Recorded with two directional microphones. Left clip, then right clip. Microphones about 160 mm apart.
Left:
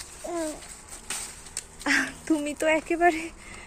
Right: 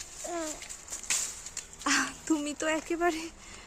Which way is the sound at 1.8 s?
20° right (ahead or behind).